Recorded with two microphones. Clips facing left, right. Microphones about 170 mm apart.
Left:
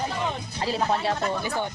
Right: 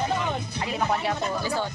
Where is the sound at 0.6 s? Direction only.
30° left (ahead or behind).